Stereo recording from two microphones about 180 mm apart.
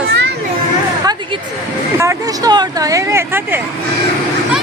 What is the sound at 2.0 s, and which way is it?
Speech, 20° right (ahead or behind).